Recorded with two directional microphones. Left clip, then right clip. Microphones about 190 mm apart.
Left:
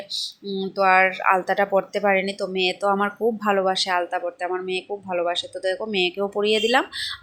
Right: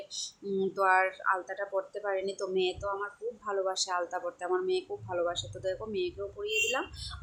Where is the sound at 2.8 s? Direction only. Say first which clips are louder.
Left 14 dB; 35° left (ahead or behind).